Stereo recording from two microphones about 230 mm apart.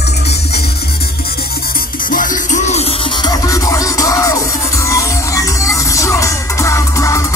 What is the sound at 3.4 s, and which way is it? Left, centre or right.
Music, centre.